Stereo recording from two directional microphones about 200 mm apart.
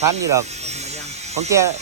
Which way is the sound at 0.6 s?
35° right (ahead or behind).